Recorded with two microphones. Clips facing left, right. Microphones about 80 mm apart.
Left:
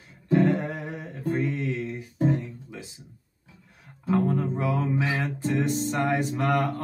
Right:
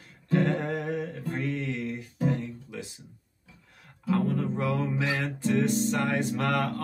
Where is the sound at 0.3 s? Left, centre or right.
Centre.